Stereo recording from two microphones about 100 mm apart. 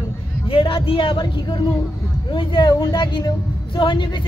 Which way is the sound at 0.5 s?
65° left (ahead or behind).